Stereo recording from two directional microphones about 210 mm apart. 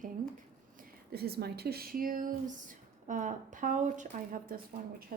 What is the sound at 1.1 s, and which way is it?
Speech, 50° right (ahead or behind).